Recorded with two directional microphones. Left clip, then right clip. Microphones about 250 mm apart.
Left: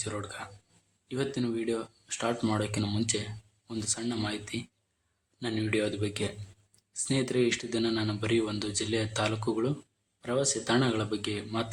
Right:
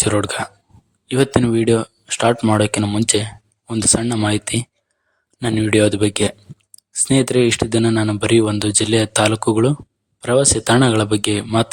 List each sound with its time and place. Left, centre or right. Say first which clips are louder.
0.0 s speech: right 18 dB; right